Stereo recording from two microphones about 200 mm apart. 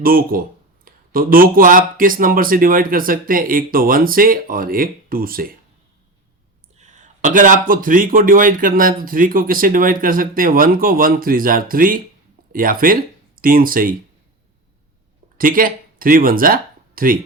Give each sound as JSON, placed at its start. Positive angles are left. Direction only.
{"t": 0.0, "sound": "speech", "side_deg": -45}
{"t": 6.7, "sound": "speech", "side_deg": -35}
{"t": 15.4, "sound": "speech", "side_deg": -45}